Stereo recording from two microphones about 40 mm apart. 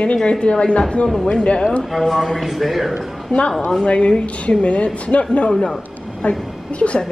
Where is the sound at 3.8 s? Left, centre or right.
Left.